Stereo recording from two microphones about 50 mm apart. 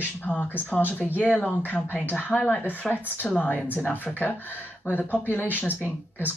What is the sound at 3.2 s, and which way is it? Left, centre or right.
Speech, centre.